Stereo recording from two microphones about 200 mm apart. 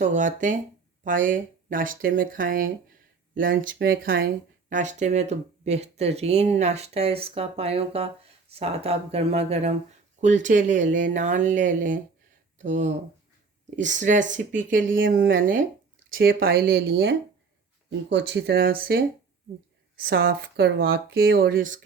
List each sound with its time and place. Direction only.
0.0 s speech: 40° right (ahead or behind)
20.1 s speech: 60° right (ahead or behind)